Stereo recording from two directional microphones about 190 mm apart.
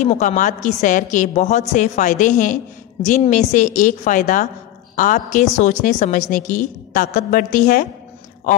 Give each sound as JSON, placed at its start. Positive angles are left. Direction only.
{"t": 0.0, "sound": "a woman's voice", "side_deg": 40}